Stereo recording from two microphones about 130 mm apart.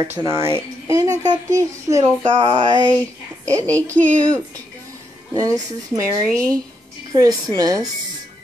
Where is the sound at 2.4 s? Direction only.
35° right (ahead or behind).